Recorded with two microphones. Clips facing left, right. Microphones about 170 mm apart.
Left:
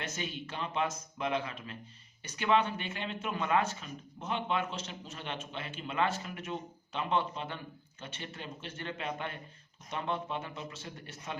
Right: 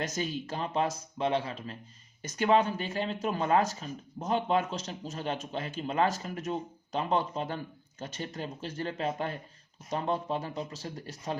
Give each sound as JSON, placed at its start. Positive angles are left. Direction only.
{"t": 0.0, "sound": "speech", "side_deg": -40}